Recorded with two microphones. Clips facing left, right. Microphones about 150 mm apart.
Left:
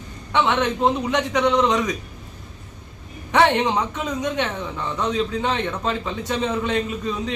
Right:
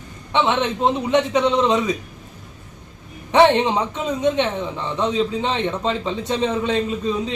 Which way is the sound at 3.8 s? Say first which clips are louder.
Right 2 dB; 30° right (ahead or behind).